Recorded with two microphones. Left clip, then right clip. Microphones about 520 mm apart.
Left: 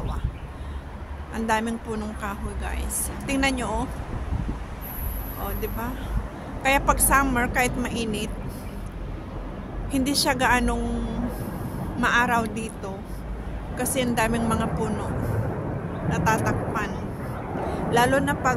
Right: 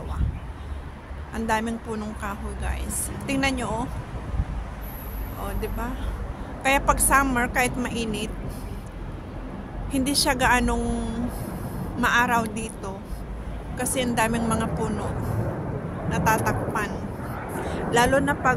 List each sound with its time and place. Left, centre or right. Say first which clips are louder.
1.3 s speech: left 1 dB; left
6.6 s speech: even; left
9.8 s speech: even; left
16.1 s speech: right 1 dB; left